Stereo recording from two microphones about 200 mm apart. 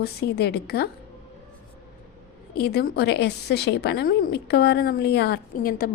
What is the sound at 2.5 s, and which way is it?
A woman's voice, 55° left (ahead or behind).